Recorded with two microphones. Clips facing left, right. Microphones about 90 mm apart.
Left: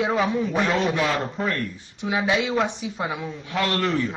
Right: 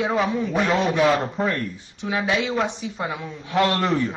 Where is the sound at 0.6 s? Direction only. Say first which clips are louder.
Right 6 dB; 15° right (ahead or behind).